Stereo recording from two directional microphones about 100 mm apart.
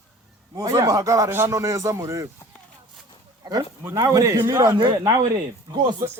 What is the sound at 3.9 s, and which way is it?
Speech, 35° right (ahead or behind).